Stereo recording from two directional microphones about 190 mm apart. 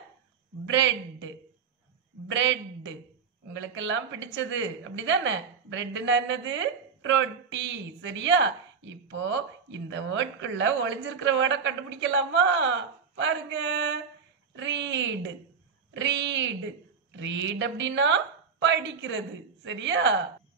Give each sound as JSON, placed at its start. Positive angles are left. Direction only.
{"t": 0.7, "sound": "a woman's voice", "side_deg": -75}